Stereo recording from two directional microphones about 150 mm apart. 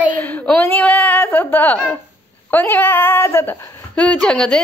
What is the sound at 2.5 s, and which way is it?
A woman's voice, 10° left (ahead or behind).